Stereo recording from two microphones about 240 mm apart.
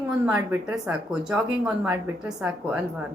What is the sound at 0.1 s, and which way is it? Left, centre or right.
A woman's voice, centre.